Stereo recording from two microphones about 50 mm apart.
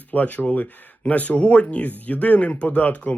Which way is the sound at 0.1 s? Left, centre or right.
Left.